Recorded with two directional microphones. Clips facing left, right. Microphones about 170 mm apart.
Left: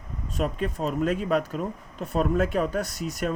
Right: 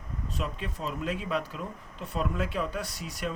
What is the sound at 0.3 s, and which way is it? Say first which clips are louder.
Speech: left 9 dB; 45° left (ahead or behind).